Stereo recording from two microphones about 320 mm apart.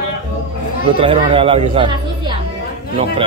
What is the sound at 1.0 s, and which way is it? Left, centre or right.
Speech, centre.